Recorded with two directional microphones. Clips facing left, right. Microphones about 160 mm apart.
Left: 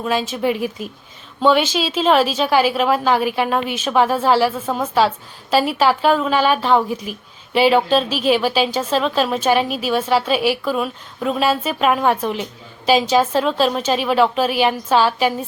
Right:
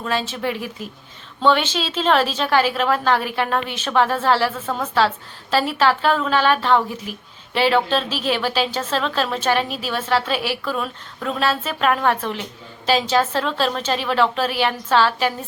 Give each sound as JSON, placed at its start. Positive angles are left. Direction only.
{"t": 0.0, "sound": "a woman's voice", "side_deg": 10}